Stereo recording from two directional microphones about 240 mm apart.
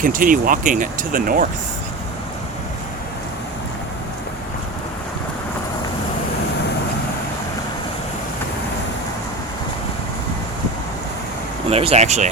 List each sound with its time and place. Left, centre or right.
0.0 s speech: right
11.7 s speech: right